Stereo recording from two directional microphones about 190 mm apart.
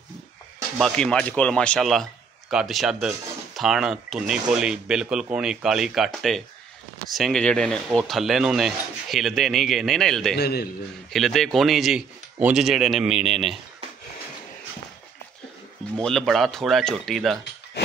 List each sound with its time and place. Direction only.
0.7 s speech: 5° left (ahead or behind)
10.3 s a man's voice: 55° left (ahead or behind)
11.1 s speech: centre (ahead or behind)
16.0 s speech: centre (ahead or behind)